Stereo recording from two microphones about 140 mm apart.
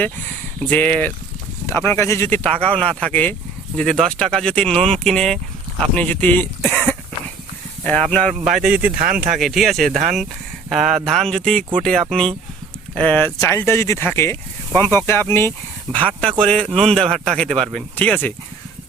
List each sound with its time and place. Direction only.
0.6 s speech: 10° left (ahead or behind)
8.1 s speech: 5° left (ahead or behind)
9.0 s speech: 85° right
9.4 s speech: centre (ahead or behind)